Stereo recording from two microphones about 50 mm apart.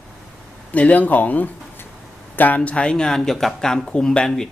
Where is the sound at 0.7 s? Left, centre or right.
Left.